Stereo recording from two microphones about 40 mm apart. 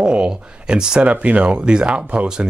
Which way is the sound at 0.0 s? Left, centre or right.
Right.